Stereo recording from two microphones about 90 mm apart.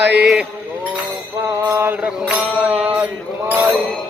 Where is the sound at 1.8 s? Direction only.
20° right (ahead or behind).